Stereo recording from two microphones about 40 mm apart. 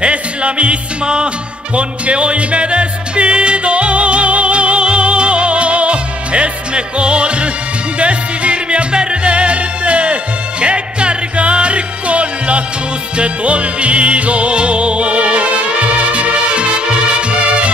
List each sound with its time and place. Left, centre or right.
0.0 s music: right